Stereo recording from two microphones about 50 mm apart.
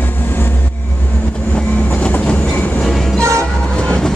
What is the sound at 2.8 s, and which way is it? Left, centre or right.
Train, centre.